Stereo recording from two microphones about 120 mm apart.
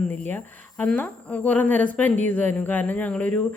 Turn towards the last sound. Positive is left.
turn(degrees=10)  # may be behind; listen again after turning